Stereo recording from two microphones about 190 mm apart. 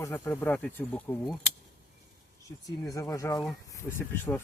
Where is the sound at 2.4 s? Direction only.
20° left (ahead or behind).